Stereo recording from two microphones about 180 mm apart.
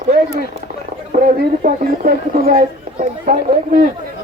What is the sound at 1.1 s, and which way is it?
Speech, 45° right (ahead or behind).